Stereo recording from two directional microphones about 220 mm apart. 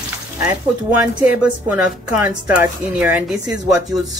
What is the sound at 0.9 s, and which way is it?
A woman's voice, 5° right (ahead or behind).